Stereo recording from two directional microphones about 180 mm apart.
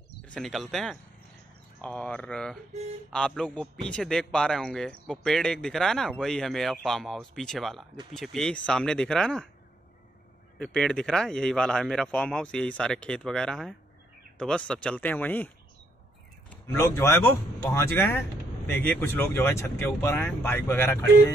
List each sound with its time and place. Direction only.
0.3 s speech: centre (ahead or behind)
2.7 s speech: 35° right (ahead or behind)
3.1 s speech: 5° left (ahead or behind)
10.6 s speech: 5° left (ahead or behind)